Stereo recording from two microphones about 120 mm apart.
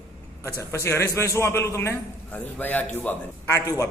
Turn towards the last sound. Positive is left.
turn(degrees=25)  # may be behind; listen again after turning